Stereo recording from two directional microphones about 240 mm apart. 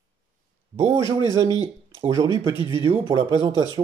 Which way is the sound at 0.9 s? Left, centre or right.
Centre.